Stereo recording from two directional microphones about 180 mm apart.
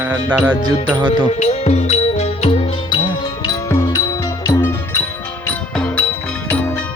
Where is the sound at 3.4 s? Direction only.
20° left (ahead or behind).